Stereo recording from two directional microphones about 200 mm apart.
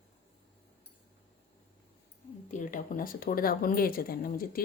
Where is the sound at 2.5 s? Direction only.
40° left (ahead or behind).